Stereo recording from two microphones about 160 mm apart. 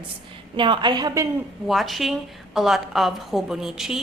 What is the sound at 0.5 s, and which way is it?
Speech, 30° right (ahead or behind).